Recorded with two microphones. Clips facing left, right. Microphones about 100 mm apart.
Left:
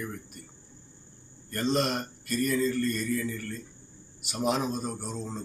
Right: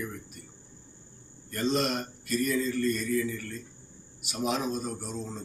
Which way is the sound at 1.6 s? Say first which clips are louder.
Even; 15° left (ahead or behind).